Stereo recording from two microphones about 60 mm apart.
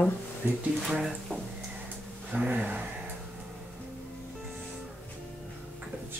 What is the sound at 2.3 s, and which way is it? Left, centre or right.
Gasp, right.